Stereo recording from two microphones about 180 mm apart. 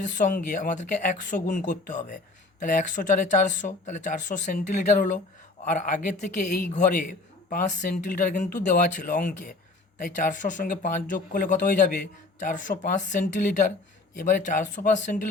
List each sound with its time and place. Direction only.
0.0 s speech: 45° left (ahead or behind)